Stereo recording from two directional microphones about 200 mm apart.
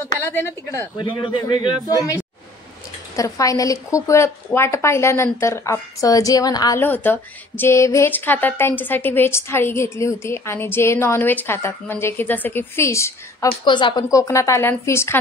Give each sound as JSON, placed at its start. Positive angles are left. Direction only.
{"t": 0.2, "sound": "a woman's voice", "side_deg": 10}